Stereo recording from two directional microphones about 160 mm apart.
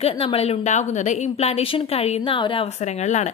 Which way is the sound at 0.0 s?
40° left (ahead or behind).